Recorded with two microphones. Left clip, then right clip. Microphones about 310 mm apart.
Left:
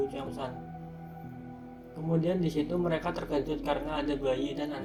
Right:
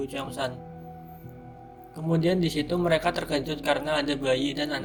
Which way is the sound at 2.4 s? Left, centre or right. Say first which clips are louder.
Right 4 dB; right.